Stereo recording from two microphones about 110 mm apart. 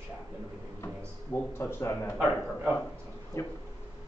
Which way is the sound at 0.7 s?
20° left (ahead or behind).